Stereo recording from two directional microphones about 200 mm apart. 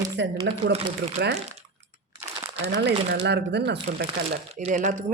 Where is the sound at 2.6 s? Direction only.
55° right (ahead or behind).